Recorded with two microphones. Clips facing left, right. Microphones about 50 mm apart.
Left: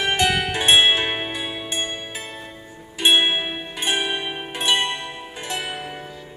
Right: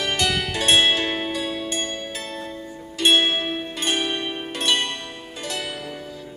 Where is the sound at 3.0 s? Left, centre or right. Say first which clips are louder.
Left 1 dB; centre.